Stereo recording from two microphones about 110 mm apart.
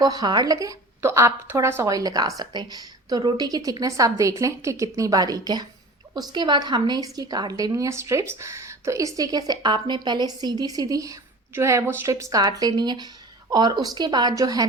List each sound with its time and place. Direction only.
0.0 s a woman's voice: 35° right (ahead or behind)